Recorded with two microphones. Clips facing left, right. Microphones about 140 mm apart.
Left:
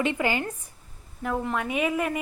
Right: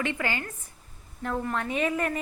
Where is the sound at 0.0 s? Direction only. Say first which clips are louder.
Left 5 dB; 20° left (ahead or behind).